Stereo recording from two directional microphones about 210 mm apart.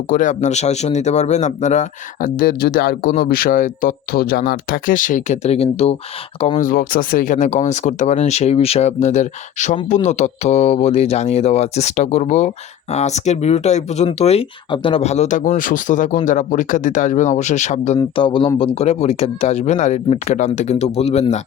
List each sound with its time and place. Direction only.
0.1 s speech: 35° left (ahead or behind)
18.2 s speech: 25° left (ahead or behind)